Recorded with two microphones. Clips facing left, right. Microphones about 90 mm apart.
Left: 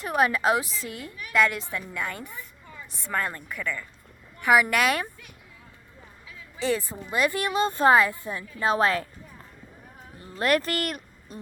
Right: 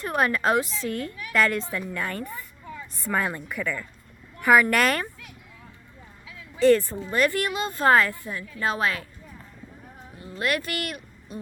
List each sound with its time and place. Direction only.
0.0 s a woman's voice: 5° left (ahead or behind)
4.4 s a woman's voice: 5° left (ahead or behind)
6.6 s speech: 5° left (ahead or behind); by 9.0 s 30° left (ahead or behind)
10.2 s speech: 35° left (ahead or behind)